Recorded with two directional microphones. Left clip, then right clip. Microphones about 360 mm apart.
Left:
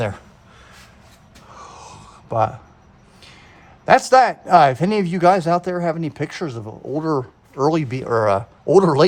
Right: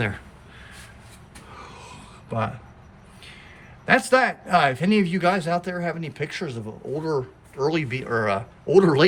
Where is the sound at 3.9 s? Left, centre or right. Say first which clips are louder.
Left 6 dB; left.